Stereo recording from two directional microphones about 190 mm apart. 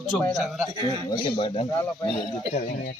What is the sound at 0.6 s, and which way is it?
Speech, 20° right (ahead or behind).